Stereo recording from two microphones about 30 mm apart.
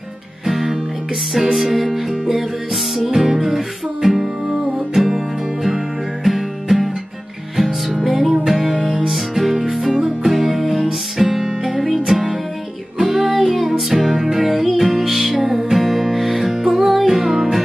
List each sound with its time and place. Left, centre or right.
0.5 s music: centre
11.2 s music: centre
12.9 s music: centre
13.3 s music: centre